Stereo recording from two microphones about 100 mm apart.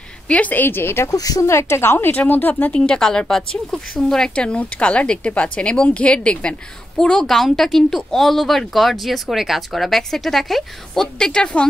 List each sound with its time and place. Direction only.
0.3 s speech: 15° left (ahead or behind)
1.1 s speech: 35° left (ahead or behind); by 2.8 s 15° left (ahead or behind)
2.8 s speech: 5° left (ahead or behind)